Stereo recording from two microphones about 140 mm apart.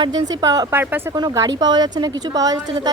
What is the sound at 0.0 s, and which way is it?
Speech, 30° right (ahead or behind).